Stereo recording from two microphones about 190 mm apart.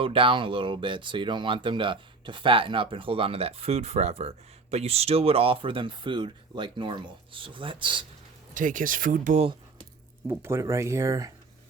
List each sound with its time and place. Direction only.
0.0 s speech: 30° right (ahead or behind)
8.5 s speech: 45° right (ahead or behind)
10.2 s speech: 15° right (ahead or behind)